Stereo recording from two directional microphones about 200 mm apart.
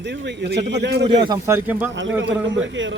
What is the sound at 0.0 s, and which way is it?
A man's voice, 60° right (ahead or behind).